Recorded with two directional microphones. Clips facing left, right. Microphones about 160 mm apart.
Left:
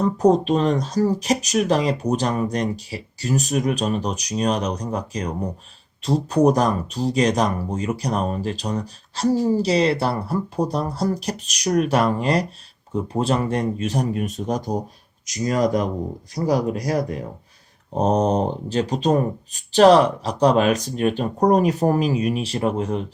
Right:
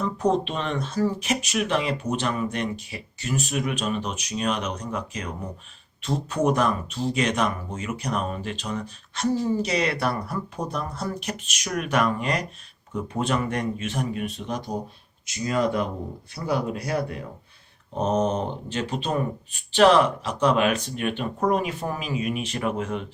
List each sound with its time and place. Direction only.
0.0 s speech: 40° left (ahead or behind)